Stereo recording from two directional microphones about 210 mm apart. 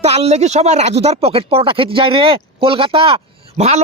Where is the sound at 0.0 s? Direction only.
30° right (ahead or behind).